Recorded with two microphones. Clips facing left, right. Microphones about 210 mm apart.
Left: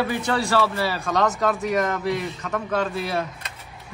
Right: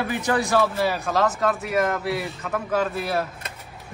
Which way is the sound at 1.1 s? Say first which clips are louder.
Left 4 dB; centre (ahead or behind).